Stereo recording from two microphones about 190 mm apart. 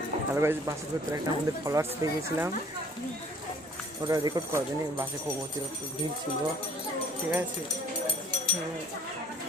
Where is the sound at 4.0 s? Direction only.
20° right (ahead or behind).